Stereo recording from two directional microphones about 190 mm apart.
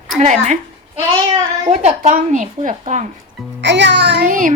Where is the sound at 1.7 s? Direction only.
35° right (ahead or behind).